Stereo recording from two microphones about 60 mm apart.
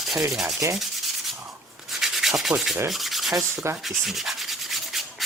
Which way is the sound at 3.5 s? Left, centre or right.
Right.